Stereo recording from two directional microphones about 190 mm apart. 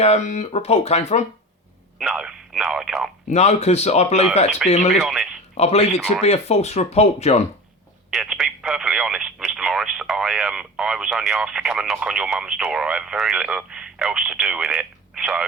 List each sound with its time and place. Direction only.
0.0 s speech: 35° left (ahead or behind)
2.0 s speech: 5° right (ahead or behind)
3.2 s speech: 35° left (ahead or behind)
4.9 s speech: centre (ahead or behind)
5.5 s speech: 35° left (ahead or behind)
8.1 s speech: centre (ahead or behind)